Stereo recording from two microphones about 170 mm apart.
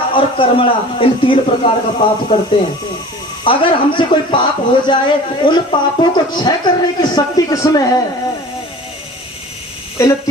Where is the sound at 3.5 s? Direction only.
30° left (ahead or behind).